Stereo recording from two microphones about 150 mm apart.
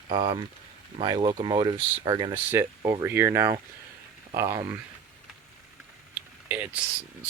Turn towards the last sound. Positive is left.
turn(degrees=-10)  # may be behind; listen again after turning